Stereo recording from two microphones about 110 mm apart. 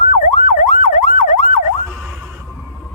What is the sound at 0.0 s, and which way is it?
Emergency vehicle, 90° left.